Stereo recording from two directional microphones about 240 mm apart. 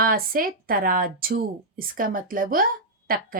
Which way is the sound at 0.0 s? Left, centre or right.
Right.